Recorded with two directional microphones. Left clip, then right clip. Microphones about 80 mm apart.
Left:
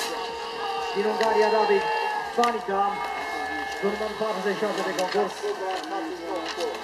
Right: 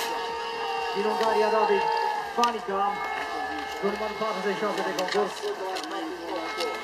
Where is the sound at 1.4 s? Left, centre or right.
Right.